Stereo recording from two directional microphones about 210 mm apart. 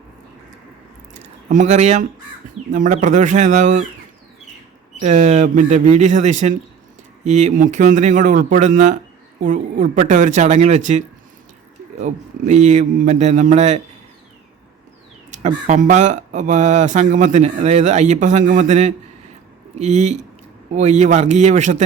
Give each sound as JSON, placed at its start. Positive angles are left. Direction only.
{"t": 1.2, "sound": "speech", "side_deg": -35}
{"t": 4.9, "sound": "speech", "side_deg": -35}
{"t": 15.3, "sound": "speech", "side_deg": -35}